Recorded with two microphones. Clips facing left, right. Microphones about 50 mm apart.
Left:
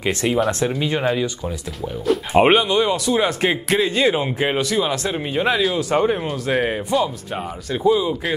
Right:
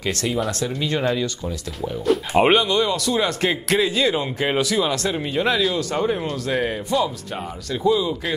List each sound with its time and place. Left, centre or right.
0.0 s a man's voice: left
2.3 s a man's voice: centre
4.0 s speech: centre
4.6 s a man's voice: centre